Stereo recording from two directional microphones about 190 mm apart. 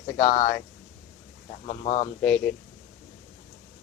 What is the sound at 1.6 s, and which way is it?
Speech, 35° left (ahead or behind).